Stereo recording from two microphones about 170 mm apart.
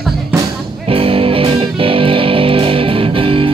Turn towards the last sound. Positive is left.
turn(degrees=-30)  # may be behind; listen again after turning